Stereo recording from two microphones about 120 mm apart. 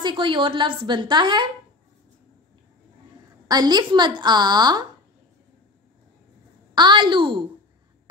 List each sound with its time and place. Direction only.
0.0 s a woman's voice: 40° right (ahead or behind)
3.4 s a woman's voice: 35° right (ahead or behind)
6.7 s a woman's voice: 40° right (ahead or behind)